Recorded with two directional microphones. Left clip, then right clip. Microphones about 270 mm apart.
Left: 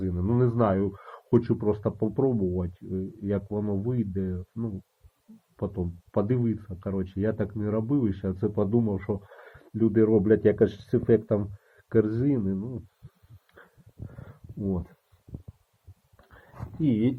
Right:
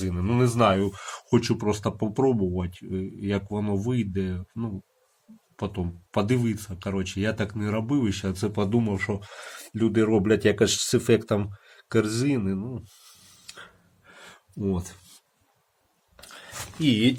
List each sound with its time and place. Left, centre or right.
0.0 s speech: centre
14.6 s speech: centre
16.8 s speech: centre